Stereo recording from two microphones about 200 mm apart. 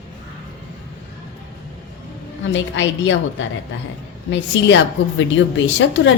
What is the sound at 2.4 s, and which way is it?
A woman's voice, 65° left (ahead or behind).